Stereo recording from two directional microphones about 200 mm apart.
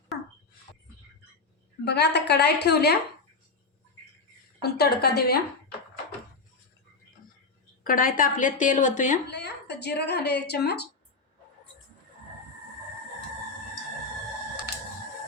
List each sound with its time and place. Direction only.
1.8 s a woman's voice: 55° left (ahead or behind)
4.6 s a woman's voice: 50° left (ahead or behind)
7.9 s a woman's voice: 45° left (ahead or behind)
9.3 s a woman's voice: 55° left (ahead or behind)